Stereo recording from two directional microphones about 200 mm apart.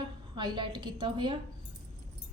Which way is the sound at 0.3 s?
25° right (ahead or behind).